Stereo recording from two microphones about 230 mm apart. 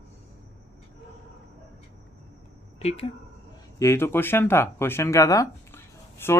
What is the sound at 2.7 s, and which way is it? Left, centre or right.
Speech, left.